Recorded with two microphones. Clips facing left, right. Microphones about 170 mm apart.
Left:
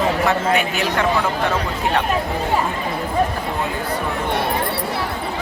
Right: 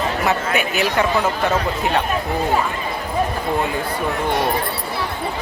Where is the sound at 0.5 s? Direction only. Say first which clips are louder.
Right 1 dB; 5° right (ahead or behind).